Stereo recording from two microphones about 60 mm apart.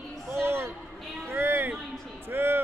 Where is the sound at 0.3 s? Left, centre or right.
Right.